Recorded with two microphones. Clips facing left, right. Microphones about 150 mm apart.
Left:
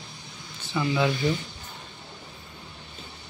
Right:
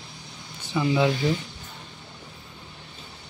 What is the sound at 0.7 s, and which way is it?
Speech, 20° right (ahead or behind).